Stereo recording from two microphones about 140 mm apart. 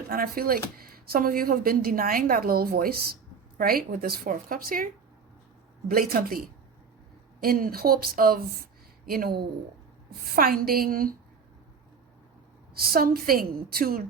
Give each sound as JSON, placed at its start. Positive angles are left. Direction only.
{"t": 0.1, "sound": "speech", "side_deg": -90}
{"t": 5.9, "sound": "speech", "side_deg": -90}
{"t": 7.4, "sound": "speech", "side_deg": -90}
{"t": 12.7, "sound": "speech", "side_deg": -90}